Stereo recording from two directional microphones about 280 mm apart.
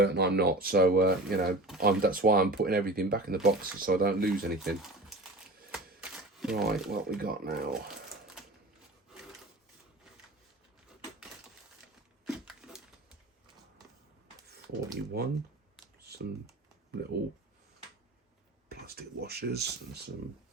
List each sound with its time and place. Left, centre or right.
0.0 s speech: right
5.7 s typewriter: centre
7.2 s speech: right
12.2 s a sound: centre
15.1 s speech: right
16.0 s computer keyboard: right
17.0 s speech: right
18.7 s speech: right